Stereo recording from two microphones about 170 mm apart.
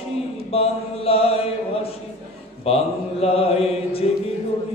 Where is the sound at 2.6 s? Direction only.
35° left (ahead or behind).